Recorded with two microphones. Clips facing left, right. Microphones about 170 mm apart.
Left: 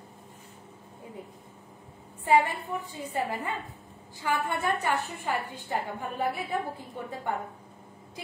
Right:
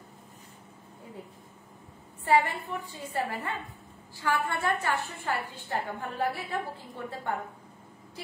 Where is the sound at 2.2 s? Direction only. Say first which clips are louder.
Left 1 dB; 15° left (ahead or behind).